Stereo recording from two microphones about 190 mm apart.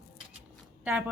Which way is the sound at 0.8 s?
5° right (ahead or behind).